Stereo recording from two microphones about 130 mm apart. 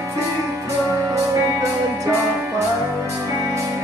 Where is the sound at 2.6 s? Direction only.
25° right (ahead or behind).